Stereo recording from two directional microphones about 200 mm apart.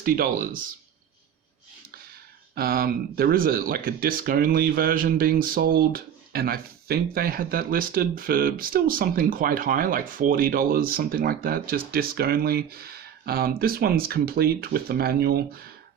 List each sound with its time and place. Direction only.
0.0 s speech: 45° right (ahead or behind)
2.6 s speech: 50° right (ahead or behind)